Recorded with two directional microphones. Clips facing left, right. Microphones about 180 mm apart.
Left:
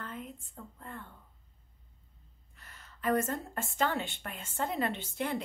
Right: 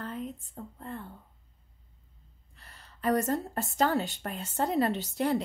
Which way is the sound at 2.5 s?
35° right (ahead or behind).